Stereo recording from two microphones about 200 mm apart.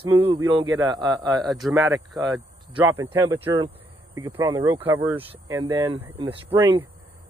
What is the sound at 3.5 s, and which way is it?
A man's voice, 25° right (ahead or behind).